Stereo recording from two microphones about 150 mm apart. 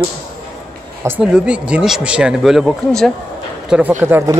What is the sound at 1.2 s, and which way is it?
Speech, 5° right (ahead or behind).